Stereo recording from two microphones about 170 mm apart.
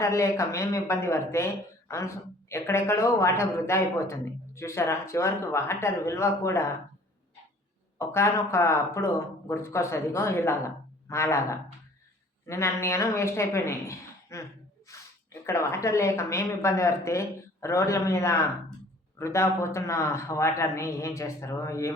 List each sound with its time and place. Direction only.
0.0 s a man's voice: 15° left (ahead or behind)
7.9 s a man's voice: 15° left (ahead or behind)